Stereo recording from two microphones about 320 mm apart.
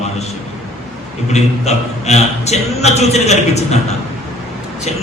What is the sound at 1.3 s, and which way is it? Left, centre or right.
A man's voice, left.